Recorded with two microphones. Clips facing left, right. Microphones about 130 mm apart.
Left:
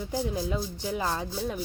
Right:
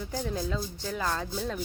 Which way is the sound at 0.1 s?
10° left (ahead or behind).